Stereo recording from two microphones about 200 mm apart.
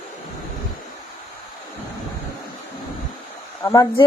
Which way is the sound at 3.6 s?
15° left (ahead or behind).